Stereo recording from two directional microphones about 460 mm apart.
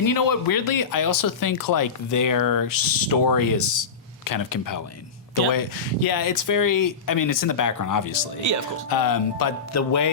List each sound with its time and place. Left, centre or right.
0.0 s speech: left